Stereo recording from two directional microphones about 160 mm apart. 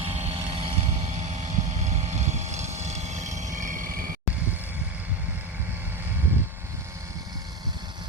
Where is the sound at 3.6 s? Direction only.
55° right (ahead or behind).